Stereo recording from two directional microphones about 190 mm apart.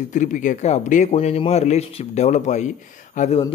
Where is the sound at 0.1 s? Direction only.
40° left (ahead or behind).